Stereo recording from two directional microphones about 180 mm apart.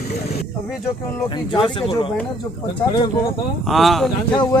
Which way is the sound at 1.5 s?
30° left (ahead or behind).